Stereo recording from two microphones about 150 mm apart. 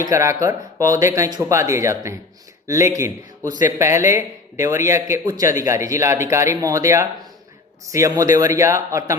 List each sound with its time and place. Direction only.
0.0 s speech: 20° right (ahead or behind)